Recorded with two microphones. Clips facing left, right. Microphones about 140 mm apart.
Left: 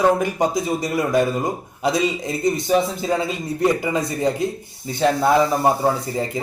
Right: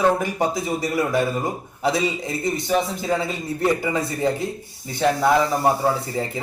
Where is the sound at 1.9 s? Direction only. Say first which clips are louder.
Left 4 dB; 20° left (ahead or behind).